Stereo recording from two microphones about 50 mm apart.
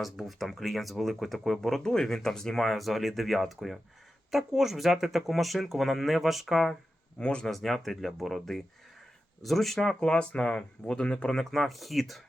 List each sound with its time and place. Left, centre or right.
0.0 s speech: centre
7.2 s speech: left
7.5 s speech: centre
9.9 s speech: centre
11.5 s speech: centre